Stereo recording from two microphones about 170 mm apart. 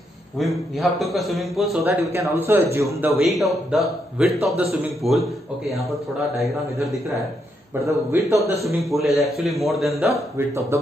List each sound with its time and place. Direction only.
0.4 s a man's voice: centre (ahead or behind)
1.9 s a man's voice: 15° right (ahead or behind)
3.3 s a man's voice: centre (ahead or behind)
6.4 s a man's voice: centre (ahead or behind)
7.8 s a man's voice: 15° right (ahead or behind)
9.1 s a man's voice: centre (ahead or behind)
10.3 s a man's voice: 15° right (ahead or behind)